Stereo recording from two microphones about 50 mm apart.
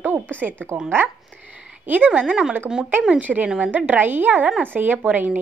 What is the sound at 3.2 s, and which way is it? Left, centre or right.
Speech, right.